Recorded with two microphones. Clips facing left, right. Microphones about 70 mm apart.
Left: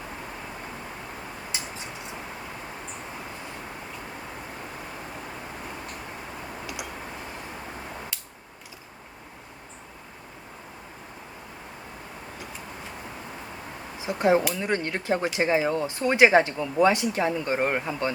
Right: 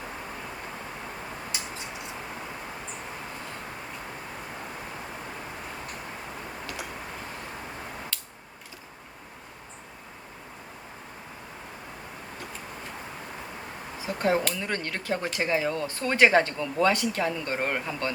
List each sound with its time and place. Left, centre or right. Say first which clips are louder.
14.0 s speech: left 4 dB; centre